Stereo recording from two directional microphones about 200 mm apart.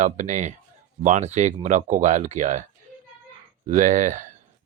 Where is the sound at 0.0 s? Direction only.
35° right (ahead or behind).